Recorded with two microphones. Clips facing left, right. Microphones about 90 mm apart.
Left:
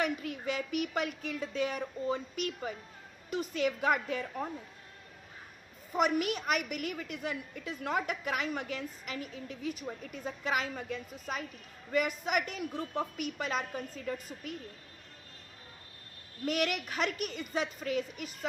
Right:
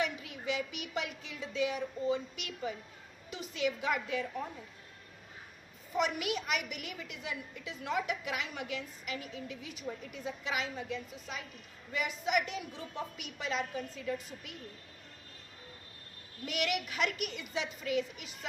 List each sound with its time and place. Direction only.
0.0 s a woman's voice: 50° left (ahead or behind)
5.9 s a woman's voice: 45° left (ahead or behind)
16.4 s a woman's voice: 45° left (ahead or behind)